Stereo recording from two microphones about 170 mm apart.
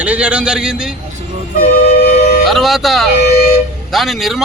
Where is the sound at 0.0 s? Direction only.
5° right (ahead or behind).